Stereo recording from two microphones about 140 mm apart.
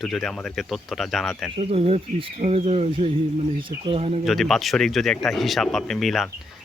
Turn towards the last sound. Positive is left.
turn(degrees=0)  # may be behind; listen again after turning